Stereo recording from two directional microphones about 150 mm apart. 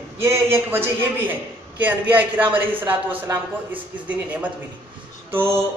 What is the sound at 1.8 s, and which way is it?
Speech, 10° right (ahead or behind).